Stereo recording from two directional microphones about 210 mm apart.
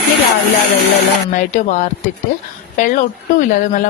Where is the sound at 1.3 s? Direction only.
35° left (ahead or behind).